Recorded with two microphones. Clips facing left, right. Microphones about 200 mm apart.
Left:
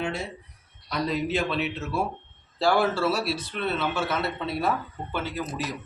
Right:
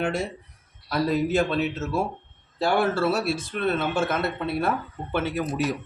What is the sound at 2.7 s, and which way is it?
Speech, 55° right (ahead or behind).